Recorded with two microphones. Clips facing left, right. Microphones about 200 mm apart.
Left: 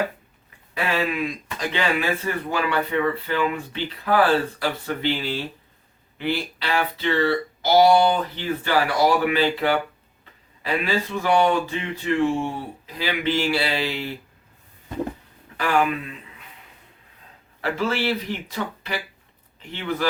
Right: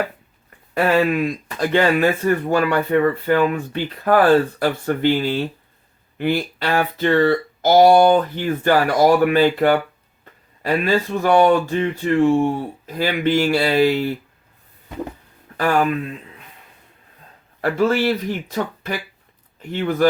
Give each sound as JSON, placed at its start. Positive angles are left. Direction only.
{"t": 0.7, "sound": "speech", "side_deg": -50}
{"t": 15.5, "sound": "speech", "side_deg": -45}
{"t": 17.6, "sound": "speech", "side_deg": -45}